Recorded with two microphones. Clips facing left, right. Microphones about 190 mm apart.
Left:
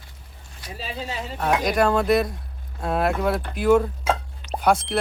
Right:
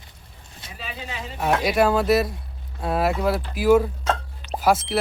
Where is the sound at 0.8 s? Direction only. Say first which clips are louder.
Left 3 dB; 35° left (ahead or behind).